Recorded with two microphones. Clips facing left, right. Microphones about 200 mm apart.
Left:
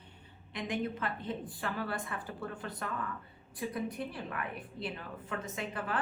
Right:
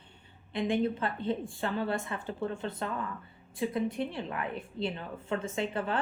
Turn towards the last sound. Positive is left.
turn(degrees=-25)  # may be behind; listen again after turning